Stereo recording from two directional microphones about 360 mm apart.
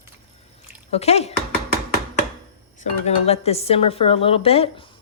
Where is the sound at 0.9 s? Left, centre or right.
Centre.